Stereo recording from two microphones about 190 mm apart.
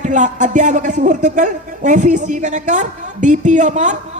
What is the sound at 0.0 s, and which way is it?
A woman's voice, 40° right (ahead or behind).